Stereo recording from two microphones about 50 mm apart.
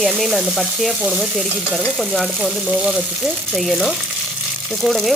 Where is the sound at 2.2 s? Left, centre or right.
Centre.